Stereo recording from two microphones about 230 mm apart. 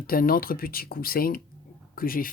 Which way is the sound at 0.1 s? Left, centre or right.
Left.